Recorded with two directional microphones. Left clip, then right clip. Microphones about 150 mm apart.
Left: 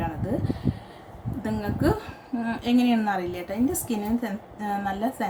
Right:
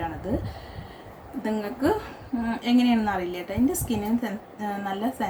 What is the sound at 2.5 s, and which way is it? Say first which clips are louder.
A woman's voice: even; 5° left (ahead or behind).